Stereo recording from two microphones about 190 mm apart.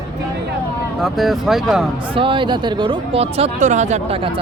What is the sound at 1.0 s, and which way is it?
Speech, centre (ahead or behind).